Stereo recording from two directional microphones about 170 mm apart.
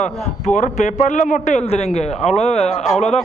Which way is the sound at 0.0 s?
45° left (ahead or behind).